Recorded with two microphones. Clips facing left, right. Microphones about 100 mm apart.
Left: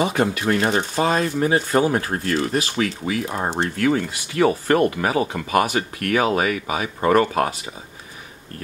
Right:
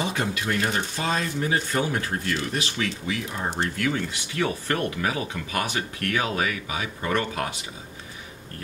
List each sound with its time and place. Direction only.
0.0 s speech: 50° left (ahead or behind)